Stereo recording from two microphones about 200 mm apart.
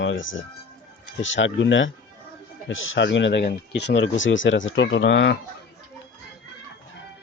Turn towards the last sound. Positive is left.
turn(degrees=65)  # may be behind; listen again after turning